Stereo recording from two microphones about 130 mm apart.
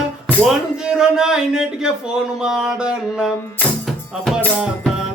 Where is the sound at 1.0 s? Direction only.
5° right (ahead or behind).